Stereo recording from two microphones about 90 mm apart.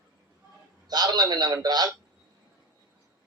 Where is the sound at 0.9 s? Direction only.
50° right (ahead or behind).